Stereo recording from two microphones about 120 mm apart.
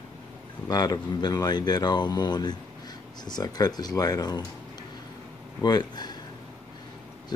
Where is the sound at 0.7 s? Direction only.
35° left (ahead or behind).